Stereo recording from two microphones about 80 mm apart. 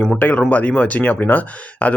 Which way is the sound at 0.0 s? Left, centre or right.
Left.